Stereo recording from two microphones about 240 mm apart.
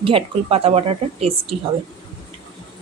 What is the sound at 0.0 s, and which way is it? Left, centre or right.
A woman's voice, right.